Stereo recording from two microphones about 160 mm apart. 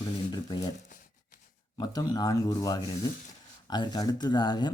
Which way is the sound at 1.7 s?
25° left (ahead or behind).